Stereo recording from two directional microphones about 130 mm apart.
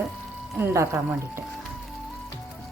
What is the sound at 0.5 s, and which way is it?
Speech, 20° right (ahead or behind).